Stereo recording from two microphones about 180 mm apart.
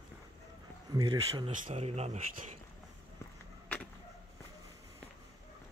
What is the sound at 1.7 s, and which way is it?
Speech, 35° right (ahead or behind).